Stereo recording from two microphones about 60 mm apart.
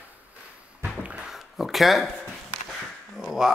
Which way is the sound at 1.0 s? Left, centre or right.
Centre.